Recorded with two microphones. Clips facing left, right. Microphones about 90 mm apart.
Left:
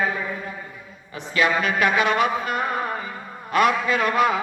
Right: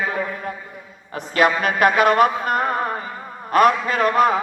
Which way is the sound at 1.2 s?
50° right (ahead or behind).